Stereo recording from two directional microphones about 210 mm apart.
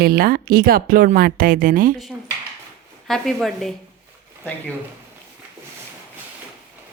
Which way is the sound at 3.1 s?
Centre (ahead or behind).